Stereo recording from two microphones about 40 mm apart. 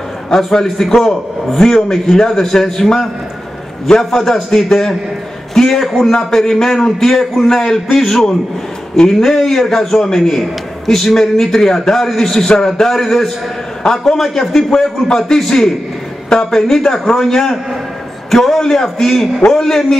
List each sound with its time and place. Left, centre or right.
0.3 s a man's voice: centre
6.1 s a man's voice: centre
6.5 s a man's voice: centre